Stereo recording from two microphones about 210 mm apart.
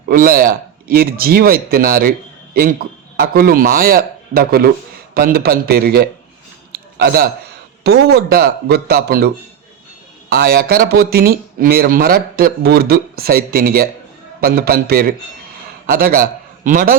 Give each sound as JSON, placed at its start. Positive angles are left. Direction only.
{"t": 0.1, "sound": "speech", "side_deg": -45}
{"t": 6.7, "sound": "a sound", "side_deg": -45}
{"t": 7.9, "sound": "a man's voice", "side_deg": -50}